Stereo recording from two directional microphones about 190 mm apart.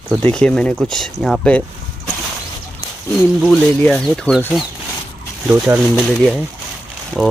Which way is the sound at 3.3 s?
Centre (ahead or behind).